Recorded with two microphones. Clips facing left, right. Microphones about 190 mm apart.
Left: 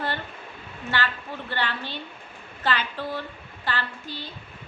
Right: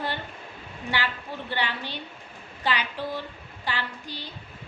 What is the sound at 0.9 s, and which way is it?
Female singing, 15° right (ahead or behind).